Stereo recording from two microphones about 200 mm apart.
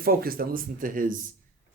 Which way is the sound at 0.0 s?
45° right (ahead or behind).